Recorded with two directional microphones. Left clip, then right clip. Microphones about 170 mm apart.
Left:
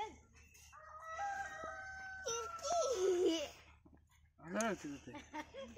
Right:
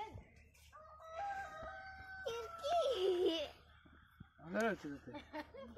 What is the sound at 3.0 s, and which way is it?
Laughter, 35° left (ahead or behind).